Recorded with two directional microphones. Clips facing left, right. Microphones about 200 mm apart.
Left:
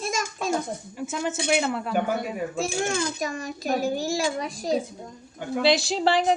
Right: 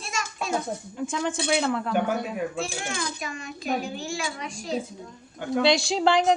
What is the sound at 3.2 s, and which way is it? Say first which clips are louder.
A child's voice: left 5 dB; 40° left (ahead or behind).